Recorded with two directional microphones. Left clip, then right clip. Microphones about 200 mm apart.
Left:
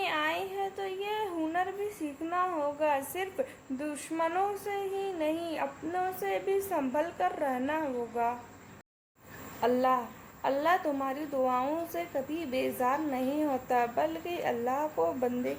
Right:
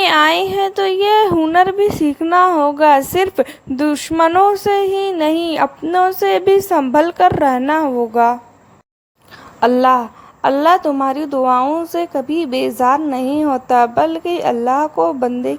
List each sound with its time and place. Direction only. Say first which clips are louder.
0.0 s speech: right 19 dB; 45° right (ahead or behind)
9.6 s a woman's voice: right 15 dB; 40° right (ahead or behind)